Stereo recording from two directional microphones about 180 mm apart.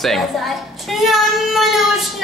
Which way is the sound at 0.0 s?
Centre (ahead or behind).